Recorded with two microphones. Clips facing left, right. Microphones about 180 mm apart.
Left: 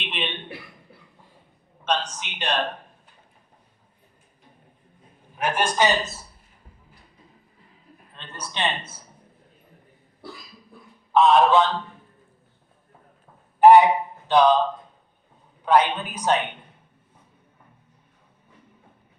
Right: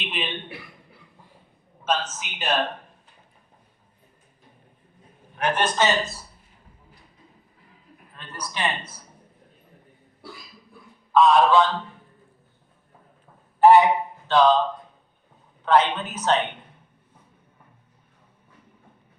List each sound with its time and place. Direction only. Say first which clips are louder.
0.0 s a sound: even; centre (ahead or behind)
1.8 s a man's voice: even; 5° right (ahead or behind)
5.4 s a man's voice: even; 10° left (ahead or behind)
8.1 s speech: right 1 dB; 25° left (ahead or behind)
11.1 s speech: even; 20° left (ahead or behind)
13.6 s a man's voice: left 2 dB; 15° left (ahead or behind)
15.6 s a man's voice: even; 10° left (ahead or behind)